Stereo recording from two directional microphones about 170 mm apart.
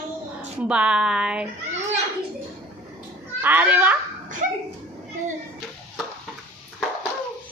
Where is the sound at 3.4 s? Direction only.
10° right (ahead or behind).